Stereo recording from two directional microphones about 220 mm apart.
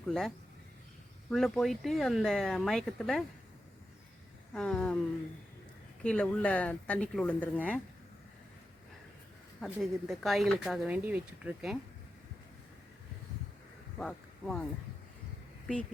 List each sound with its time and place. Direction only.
0.1 s speech: centre (ahead or behind)
4.5 s speech: 5° left (ahead or behind)
6.0 s speech: 5° left (ahead or behind)
9.6 s speech: centre (ahead or behind)
14.0 s speech: 5° left (ahead or behind)